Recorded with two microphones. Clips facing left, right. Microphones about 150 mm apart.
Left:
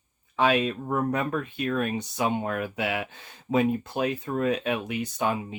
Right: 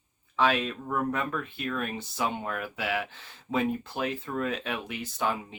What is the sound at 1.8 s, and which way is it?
Speech, 20° left (ahead or behind).